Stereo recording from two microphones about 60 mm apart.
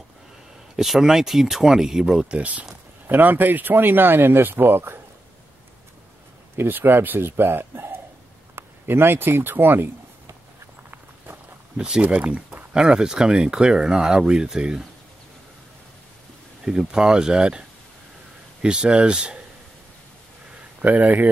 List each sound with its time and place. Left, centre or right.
0.7 s speech: centre; by 2.6 s right
3.1 s speech: right
6.5 s speech: right
10.9 s walk: right
12.0 s speech: right
16.6 s speech: centre
20.8 s speech: right